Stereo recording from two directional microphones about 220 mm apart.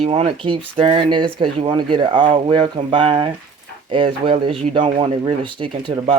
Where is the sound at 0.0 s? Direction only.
25° right (ahead or behind).